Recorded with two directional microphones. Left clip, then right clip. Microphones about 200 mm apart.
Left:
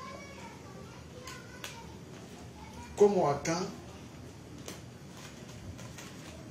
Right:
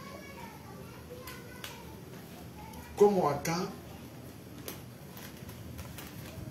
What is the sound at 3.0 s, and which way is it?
Speech, 35° right (ahead or behind).